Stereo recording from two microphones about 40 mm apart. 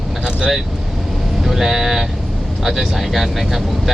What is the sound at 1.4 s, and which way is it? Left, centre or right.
Speech, centre.